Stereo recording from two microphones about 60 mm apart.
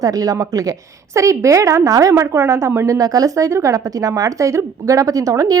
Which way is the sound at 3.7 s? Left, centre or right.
Right.